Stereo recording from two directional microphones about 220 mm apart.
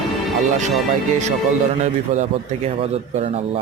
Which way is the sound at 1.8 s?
30° right (ahead or behind).